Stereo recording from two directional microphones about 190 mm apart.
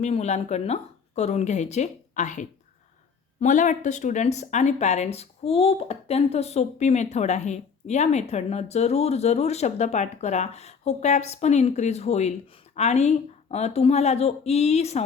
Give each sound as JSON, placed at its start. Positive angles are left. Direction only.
{"t": 0.0, "sound": "speech", "side_deg": 35}